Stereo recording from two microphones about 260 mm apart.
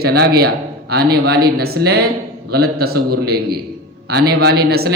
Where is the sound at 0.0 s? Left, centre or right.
Right.